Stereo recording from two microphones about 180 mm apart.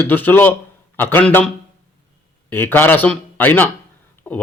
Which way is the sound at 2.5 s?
10° left (ahead or behind).